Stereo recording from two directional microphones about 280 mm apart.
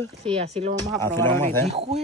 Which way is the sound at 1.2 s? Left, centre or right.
Centre.